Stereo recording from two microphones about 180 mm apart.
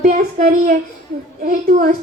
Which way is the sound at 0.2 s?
55° right (ahead or behind).